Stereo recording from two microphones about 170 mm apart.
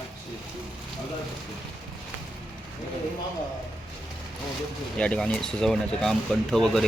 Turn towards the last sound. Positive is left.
turn(degrees=0)  # may be behind; listen again after turning